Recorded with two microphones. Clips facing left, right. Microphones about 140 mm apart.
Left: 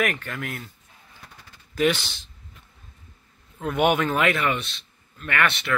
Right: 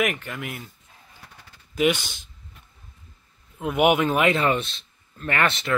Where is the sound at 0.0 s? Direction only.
10° right (ahead or behind).